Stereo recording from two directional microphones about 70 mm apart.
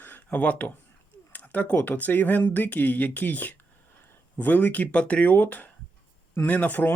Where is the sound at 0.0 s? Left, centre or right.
Left.